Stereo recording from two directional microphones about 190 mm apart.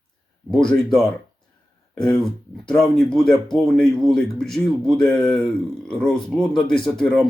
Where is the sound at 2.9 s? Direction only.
Centre (ahead or behind).